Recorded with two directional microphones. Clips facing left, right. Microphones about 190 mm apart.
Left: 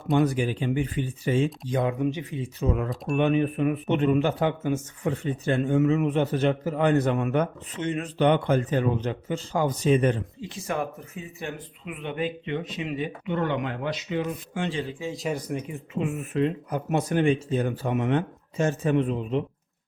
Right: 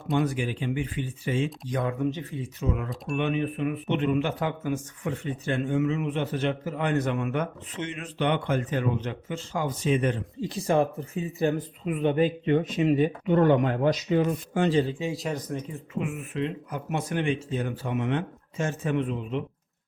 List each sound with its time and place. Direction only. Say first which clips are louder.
0.3 s a man's voice: left 3 dB; 40° left (ahead or behind)
1.6 s speech: left 2 dB; 20° left (ahead or behind)
2.4 s a man's voice: left 4 dB; 35° left (ahead or behind)
5.5 s a man's voice: left 4 dB; 40° left (ahead or behind)
10.4 s speech: right 7 dB; 35° right (ahead or behind)
15.1 s speech: left 1 dB; centre (ahead or behind)
15.4 s speech: left 2 dB; 10° left (ahead or behind)
16.3 s a man's voice: left 5 dB; 40° left (ahead or behind)